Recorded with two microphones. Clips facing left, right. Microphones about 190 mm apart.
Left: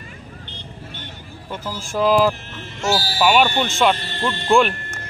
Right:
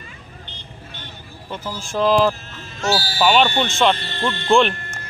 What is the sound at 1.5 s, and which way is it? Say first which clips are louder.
Speech: even; 10° left (ahead or behind).